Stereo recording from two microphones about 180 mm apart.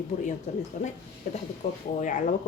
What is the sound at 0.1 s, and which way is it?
Speech, 40° left (ahead or behind).